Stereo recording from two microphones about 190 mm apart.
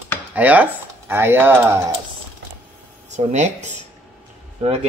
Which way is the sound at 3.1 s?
35° right (ahead or behind).